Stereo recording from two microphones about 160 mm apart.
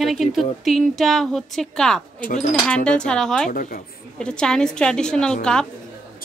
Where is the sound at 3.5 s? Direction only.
60° left (ahead or behind).